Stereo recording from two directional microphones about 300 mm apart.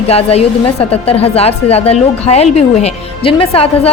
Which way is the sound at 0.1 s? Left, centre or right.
Centre.